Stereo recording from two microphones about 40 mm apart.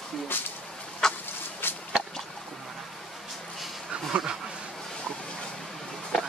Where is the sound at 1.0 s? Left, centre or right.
Centre.